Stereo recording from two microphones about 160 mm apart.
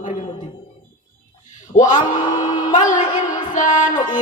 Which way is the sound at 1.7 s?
50° left (ahead or behind).